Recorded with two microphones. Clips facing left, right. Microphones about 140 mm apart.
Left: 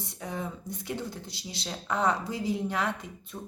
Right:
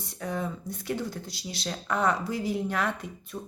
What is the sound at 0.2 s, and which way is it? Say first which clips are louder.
Speech: right 4 dB; 20° left (ahead or behind).